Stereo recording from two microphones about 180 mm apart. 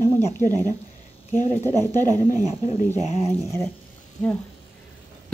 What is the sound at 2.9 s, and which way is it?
Speech, 40° left (ahead or behind).